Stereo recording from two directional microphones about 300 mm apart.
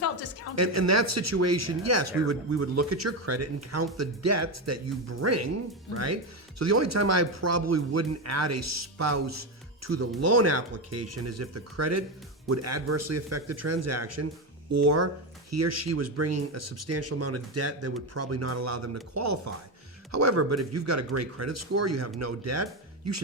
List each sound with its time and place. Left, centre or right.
0.5 s speech: right